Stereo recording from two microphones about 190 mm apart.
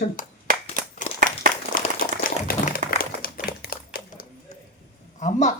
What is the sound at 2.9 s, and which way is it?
Typewriter, 50° left (ahead or behind).